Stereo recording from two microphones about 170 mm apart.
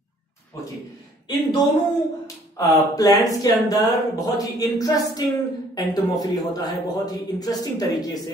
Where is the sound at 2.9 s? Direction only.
20° left (ahead or behind).